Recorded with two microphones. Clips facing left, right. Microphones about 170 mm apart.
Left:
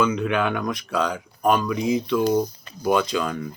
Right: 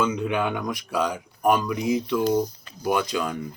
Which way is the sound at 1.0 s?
15° right (ahead or behind).